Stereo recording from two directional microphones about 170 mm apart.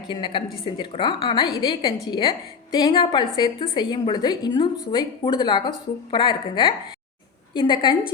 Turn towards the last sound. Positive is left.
turn(degrees=25)  # may be behind; listen again after turning